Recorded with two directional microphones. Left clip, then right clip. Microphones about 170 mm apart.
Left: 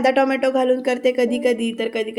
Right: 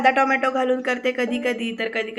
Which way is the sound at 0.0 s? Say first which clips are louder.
Left 1 dB; 40° left (ahead or behind).